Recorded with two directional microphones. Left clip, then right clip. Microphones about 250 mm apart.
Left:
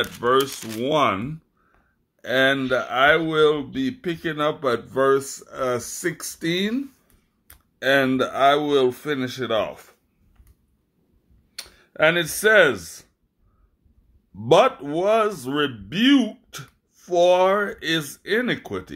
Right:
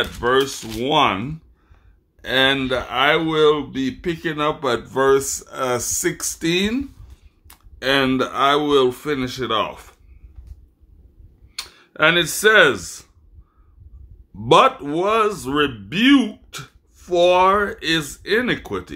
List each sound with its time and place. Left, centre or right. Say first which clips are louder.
0.0 s speech: right 2 dB; centre
11.5 s speech: right 2 dB; centre
14.4 s speech: right 3 dB; centre